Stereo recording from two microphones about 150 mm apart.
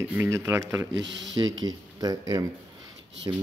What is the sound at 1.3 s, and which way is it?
A man's voice, 30° right (ahead or behind).